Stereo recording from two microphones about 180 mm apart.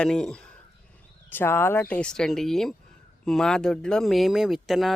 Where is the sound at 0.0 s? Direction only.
5° left (ahead or behind).